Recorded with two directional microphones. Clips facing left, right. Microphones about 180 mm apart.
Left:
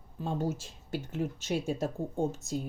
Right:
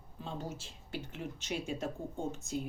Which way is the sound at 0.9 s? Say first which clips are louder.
Left 7 dB; 45° left (ahead or behind).